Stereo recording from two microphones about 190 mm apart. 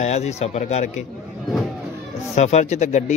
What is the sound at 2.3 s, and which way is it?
Speech, 35° left (ahead or behind).